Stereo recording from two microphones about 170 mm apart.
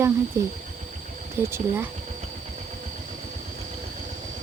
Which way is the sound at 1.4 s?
15° right (ahead or behind).